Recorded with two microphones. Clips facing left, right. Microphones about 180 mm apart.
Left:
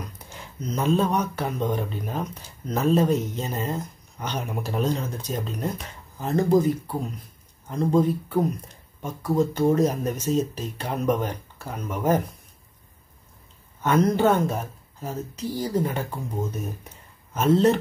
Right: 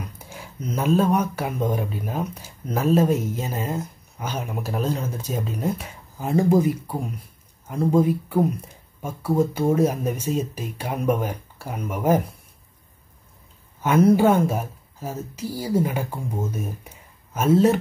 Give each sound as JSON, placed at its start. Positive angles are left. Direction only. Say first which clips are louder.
{"t": 0.0, "sound": "speech", "louder": "right 2 dB", "side_deg": -10}
{"t": 13.8, "sound": "speech", "louder": "right 3 dB", "side_deg": -10}